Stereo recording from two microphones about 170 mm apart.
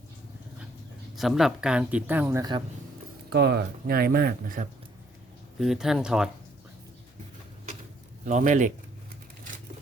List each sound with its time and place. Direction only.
1.1 s speech: centre (ahead or behind); by 2.6 s 25° right (ahead or behind)
3.2 s speech: 75° right (ahead or behind); by 4.7 s 55° right (ahead or behind)
5.5 s speech: centre (ahead or behind)
8.2 s speech: 45° right (ahead or behind)